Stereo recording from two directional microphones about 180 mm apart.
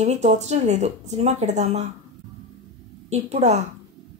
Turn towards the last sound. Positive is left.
turn(degrees=-40)  # may be behind; listen again after turning